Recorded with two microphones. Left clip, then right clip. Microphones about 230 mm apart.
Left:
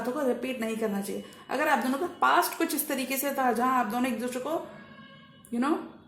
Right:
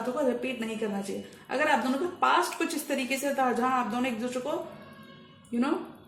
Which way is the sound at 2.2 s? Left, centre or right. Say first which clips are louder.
Left 1 dB; left.